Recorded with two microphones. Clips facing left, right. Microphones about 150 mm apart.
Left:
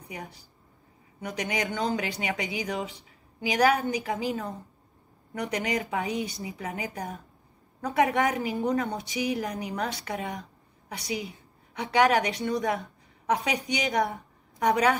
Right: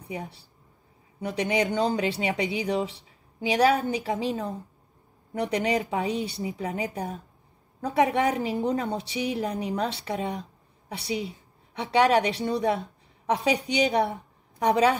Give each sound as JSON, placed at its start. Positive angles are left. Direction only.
{"t": 1.2, "sound": "speech", "side_deg": -30}
{"t": 5.9, "sound": "a woman's voice", "side_deg": -30}